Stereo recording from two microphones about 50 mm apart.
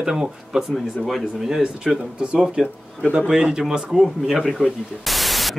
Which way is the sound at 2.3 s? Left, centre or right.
Centre.